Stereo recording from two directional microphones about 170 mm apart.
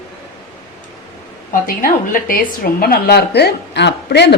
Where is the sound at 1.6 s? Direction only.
55° left (ahead or behind).